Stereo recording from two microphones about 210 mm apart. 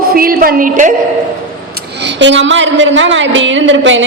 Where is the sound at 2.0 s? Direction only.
60° right (ahead or behind).